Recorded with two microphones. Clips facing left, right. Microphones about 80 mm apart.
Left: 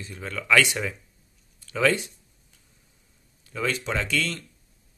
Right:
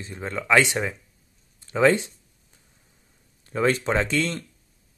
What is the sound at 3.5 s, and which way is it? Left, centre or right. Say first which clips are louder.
Speech: right 6 dB; right.